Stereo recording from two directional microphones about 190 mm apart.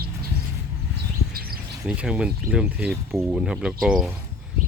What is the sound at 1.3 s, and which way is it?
Bird, 50° right (ahead or behind).